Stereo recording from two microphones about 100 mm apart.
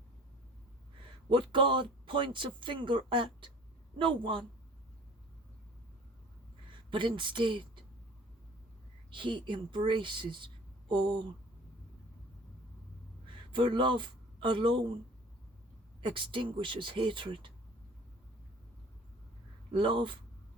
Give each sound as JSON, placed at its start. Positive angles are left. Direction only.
{"t": 1.3, "sound": "speech", "side_deg": -55}
{"t": 6.9, "sound": "speech", "side_deg": -55}
{"t": 9.0, "sound": "speech", "side_deg": -55}
{"t": 13.5, "sound": "speech", "side_deg": -55}
{"t": 16.0, "sound": "speech", "side_deg": -55}
{"t": 19.7, "sound": "speech", "side_deg": -55}